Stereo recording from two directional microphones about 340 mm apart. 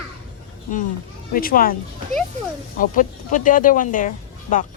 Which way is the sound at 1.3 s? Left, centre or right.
Left.